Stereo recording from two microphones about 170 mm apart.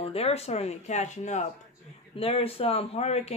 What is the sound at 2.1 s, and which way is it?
Speech, 35° left (ahead or behind).